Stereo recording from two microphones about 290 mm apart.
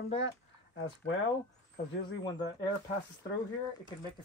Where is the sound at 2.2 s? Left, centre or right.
Centre.